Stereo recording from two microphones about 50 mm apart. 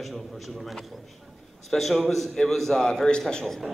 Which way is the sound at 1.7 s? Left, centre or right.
Centre.